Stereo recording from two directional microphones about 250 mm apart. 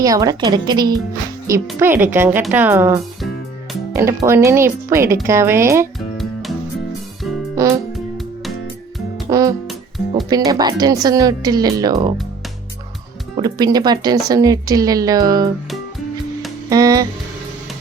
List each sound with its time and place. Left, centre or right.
0.0 s a woman's voice: centre
9.3 s music: centre
10.2 s a woman's voice: centre
13.3 s a woman's voice: centre
16.6 s music: centre